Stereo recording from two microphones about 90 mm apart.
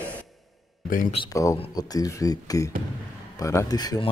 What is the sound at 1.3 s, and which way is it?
Speech, 35° left (ahead or behind).